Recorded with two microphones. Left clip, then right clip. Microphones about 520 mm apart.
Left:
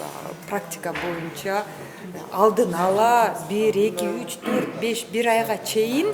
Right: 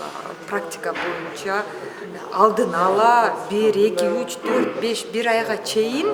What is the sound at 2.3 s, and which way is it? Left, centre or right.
Speech, left.